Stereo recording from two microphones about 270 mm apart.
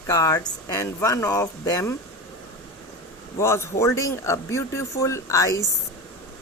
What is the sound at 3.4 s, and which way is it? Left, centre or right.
A woman's voice, centre.